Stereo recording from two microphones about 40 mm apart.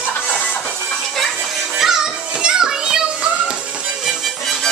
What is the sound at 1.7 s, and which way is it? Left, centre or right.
Music, centre.